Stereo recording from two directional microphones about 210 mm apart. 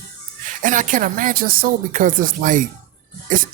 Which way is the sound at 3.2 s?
40° right (ahead or behind).